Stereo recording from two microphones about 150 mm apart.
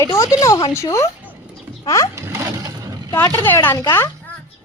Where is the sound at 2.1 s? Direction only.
20° right (ahead or behind).